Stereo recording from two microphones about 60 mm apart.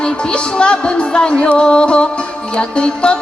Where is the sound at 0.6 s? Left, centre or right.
Centre.